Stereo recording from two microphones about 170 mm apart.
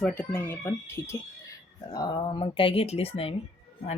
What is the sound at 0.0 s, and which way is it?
Speech, 10° left (ahead or behind).